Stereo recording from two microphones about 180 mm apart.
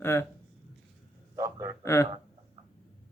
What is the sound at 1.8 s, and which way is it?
Speech, 15° left (ahead or behind).